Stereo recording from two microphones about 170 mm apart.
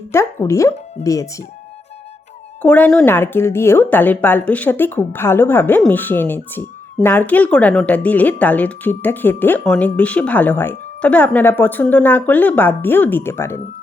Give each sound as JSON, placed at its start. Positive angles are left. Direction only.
{"t": 0.1, "sound": "speech", "side_deg": 15}
{"t": 2.6, "sound": "speech", "side_deg": 10}